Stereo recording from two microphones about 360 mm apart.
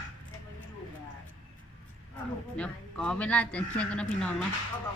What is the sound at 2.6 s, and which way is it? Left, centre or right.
A woman's voice, centre.